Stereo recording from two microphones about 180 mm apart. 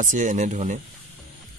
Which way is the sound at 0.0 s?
45° right (ahead or behind).